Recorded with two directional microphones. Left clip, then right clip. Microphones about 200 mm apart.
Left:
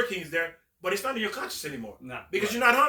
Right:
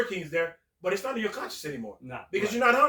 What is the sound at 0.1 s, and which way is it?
A man's voice, 20° left (ahead or behind).